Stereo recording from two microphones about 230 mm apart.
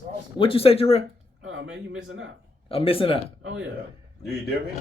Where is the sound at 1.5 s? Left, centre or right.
Right.